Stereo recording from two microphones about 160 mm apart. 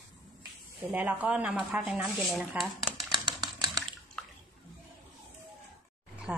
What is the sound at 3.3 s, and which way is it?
Stir, 25° right (ahead or behind).